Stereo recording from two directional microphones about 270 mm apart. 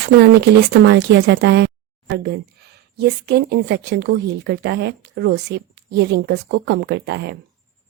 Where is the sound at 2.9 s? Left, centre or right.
Right.